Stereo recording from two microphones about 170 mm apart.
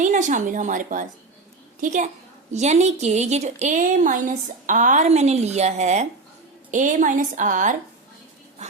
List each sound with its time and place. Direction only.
0.0 s a woman's voice: 45° right (ahead or behind)